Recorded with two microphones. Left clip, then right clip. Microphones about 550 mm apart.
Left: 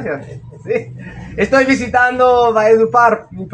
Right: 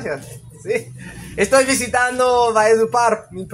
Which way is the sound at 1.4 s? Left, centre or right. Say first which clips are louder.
Left 2 dB; right.